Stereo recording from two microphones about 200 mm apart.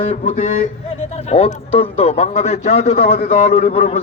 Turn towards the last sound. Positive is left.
turn(degrees=35)  # may be behind; listen again after turning